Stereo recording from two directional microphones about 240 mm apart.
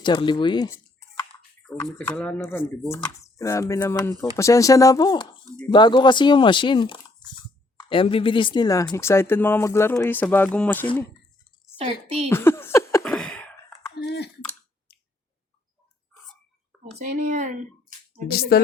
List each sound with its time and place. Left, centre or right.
0.0 s speech: centre
11.8 s a woman's voice: right
12.3 s a sound: centre
14.0 s typing: left
16.8 s speech: right
18.3 s speech: left